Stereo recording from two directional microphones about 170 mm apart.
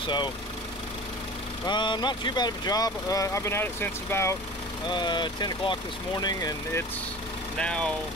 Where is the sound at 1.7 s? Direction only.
25° left (ahead or behind).